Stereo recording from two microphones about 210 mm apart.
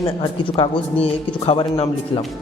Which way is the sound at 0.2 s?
25° left (ahead or behind).